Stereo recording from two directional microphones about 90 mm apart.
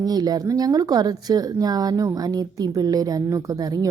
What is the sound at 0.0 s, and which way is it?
Speech, 45° right (ahead or behind).